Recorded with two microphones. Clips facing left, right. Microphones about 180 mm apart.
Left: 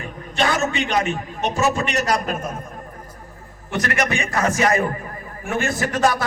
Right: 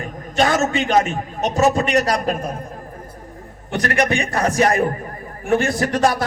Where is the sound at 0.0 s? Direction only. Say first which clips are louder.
Right 3 dB; 45° right (ahead or behind).